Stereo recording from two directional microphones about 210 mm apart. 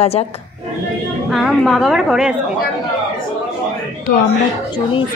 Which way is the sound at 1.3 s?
Centre (ahead or behind).